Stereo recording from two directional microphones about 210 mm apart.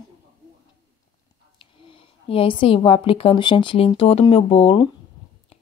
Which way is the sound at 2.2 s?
25° left (ahead or behind).